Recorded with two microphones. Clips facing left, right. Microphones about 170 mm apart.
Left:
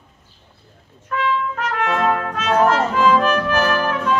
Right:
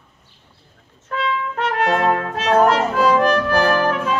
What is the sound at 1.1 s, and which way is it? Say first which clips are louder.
Brass instrument: left 1 dB; 35° right (ahead or behind).